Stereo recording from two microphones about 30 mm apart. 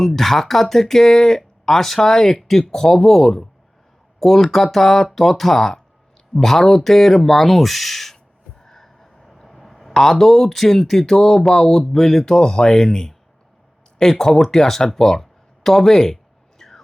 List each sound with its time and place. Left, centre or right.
0.0 s speech: centre
2.4 s speech: centre
4.4 s speech: centre
8.5 s a sound: centre
9.9 s speech: centre